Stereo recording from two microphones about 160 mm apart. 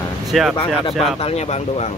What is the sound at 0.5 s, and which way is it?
Speech, 35° left (ahead or behind).